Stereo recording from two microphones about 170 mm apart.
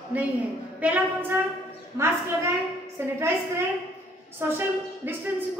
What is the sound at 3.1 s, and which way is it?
A woman's voice, 15° right (ahead or behind).